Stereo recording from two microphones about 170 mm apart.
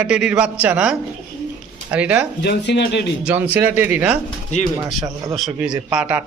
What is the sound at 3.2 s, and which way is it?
Speech, 10° right (ahead or behind).